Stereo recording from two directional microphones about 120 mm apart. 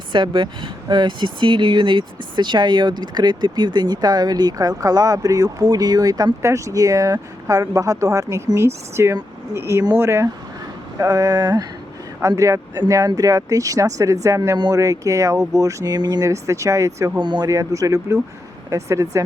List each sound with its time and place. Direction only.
0.1 s speech: 40° right (ahead or behind); by 17.1 s 25° right (ahead or behind)
17.2 s speech: 40° right (ahead or behind)